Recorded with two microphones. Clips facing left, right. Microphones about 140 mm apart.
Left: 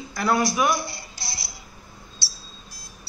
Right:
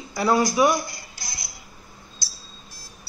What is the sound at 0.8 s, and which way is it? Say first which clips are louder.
Speech: left 1 dB; 30° left (ahead or behind).